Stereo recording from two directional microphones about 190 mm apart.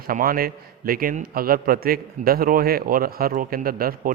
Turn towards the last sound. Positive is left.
turn(degrees=-50)  # may be behind; listen again after turning